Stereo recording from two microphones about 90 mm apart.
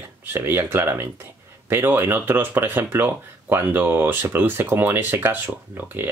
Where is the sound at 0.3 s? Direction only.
25° right (ahead or behind).